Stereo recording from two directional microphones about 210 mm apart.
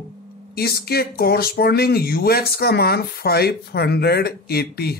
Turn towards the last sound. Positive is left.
turn(degrees=50)  # may be behind; listen again after turning